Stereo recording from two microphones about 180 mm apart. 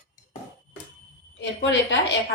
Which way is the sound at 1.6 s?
75° left (ahead or behind).